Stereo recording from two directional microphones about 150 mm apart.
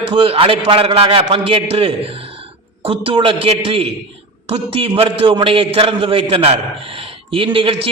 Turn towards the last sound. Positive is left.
turn(degrees=-35)  # may be behind; listen again after turning